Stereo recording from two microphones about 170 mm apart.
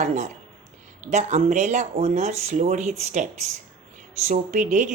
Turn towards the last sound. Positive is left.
turn(degrees=-45)  # may be behind; listen again after turning